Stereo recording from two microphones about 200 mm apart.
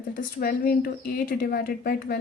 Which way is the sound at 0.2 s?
45° left (ahead or behind).